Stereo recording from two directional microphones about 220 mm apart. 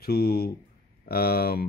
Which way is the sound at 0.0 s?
45° left (ahead or behind).